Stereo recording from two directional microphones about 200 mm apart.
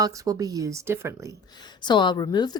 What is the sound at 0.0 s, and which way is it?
Speech, 15° right (ahead or behind).